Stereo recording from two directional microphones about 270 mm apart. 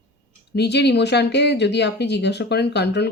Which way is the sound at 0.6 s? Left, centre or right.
Left.